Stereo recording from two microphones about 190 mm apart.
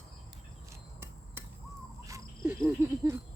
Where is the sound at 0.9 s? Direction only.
10° right (ahead or behind).